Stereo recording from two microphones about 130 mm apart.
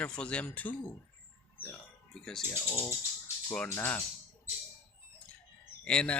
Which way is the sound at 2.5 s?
15° left (ahead or behind).